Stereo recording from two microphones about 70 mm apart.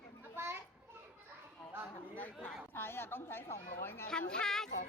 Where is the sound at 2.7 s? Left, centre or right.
Left.